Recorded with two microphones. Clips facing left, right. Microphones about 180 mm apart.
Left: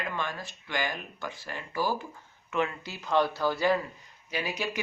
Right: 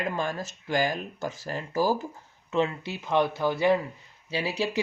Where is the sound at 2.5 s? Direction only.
25° right (ahead or behind).